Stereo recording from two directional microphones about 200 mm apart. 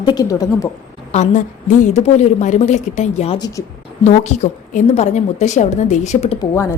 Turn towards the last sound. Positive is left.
turn(degrees=15)  # may be behind; listen again after turning